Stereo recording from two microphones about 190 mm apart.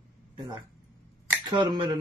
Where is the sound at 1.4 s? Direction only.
20° right (ahead or behind).